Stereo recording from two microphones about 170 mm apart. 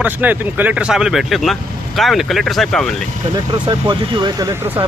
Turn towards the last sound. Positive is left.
turn(degrees=-15)  # may be behind; listen again after turning